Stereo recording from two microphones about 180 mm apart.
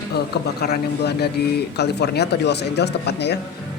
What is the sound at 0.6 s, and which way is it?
Speech, 65° left (ahead or behind).